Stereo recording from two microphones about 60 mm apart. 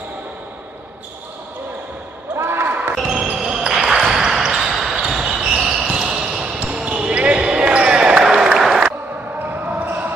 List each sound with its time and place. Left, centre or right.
2.3 s basketball bounce: right
2.9 s basketball bounce: centre
8.5 s applause: centre
9.5 s basketball bounce: right